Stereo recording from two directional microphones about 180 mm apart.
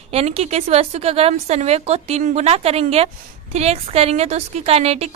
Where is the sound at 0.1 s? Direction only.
35° right (ahead or behind).